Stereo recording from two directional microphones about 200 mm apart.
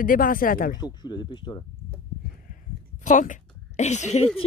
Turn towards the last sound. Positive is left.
turn(degrees=30)  # may be behind; listen again after turning